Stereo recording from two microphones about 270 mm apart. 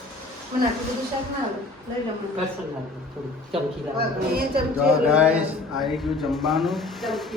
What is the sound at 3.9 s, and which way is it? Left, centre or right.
Speech, right.